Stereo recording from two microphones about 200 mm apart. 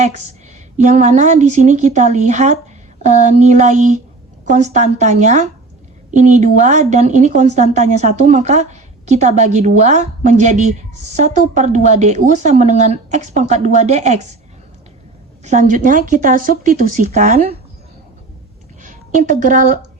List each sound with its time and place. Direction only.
0.0 s a woman's voice: 35° right (ahead or behind)
15.4 s a woman's voice: 40° right (ahead or behind)
18.8 s a woman's voice: 40° right (ahead or behind)